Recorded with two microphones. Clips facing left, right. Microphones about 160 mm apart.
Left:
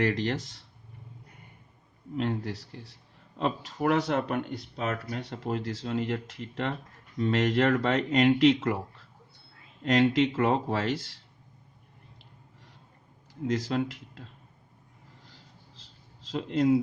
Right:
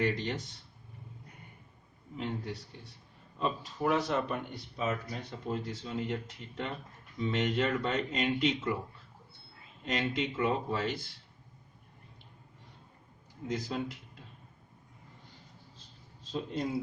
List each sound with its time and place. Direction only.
0.0 s speech: 90° left
2.1 s speech: 85° left
9.8 s speech: 90° left
13.5 s speech: 90° left
15.3 s a sound: 90° left